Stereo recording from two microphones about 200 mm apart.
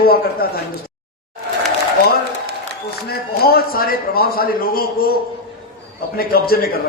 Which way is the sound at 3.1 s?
50° left (ahead or behind).